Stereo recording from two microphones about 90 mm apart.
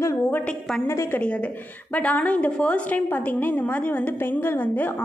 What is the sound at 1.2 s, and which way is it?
A woman's voice, 15° left (ahead or behind).